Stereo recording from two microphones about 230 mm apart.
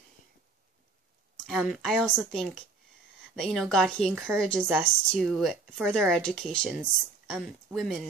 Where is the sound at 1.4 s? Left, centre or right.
Centre.